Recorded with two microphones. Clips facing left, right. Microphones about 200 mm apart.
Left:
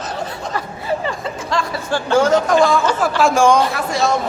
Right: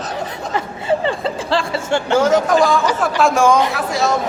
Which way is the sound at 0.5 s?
25° right (ahead or behind).